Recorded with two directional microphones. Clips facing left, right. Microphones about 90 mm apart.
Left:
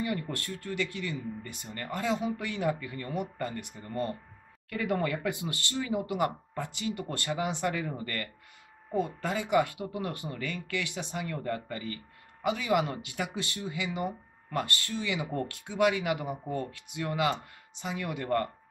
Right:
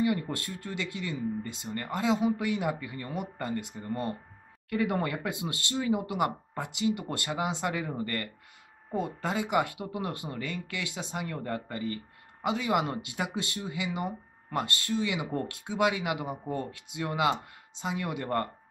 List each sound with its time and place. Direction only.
0.0 s speech: 20° right (ahead or behind)